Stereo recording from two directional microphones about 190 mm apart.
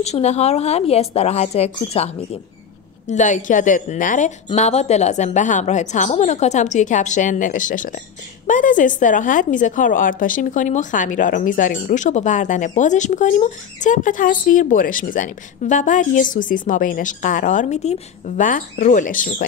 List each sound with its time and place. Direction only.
0.0 s a woman's voice: 35° left (ahead or behind)
3.1 s a woman's voice: 40° left (ahead or behind)